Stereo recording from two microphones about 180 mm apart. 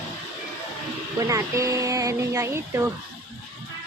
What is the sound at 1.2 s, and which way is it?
Speech, 15° right (ahead or behind).